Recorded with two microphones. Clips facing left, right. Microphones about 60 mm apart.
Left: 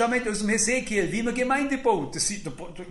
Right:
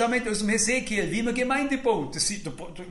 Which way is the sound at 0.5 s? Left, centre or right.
Left.